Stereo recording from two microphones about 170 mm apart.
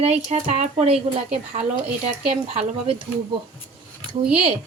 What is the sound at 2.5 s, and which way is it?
Speech, 35° right (ahead or behind).